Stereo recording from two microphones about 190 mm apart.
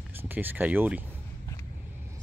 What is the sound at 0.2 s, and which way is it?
Speech, 10° right (ahead or behind).